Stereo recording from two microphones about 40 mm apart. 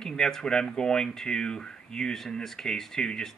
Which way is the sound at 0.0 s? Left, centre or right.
Centre.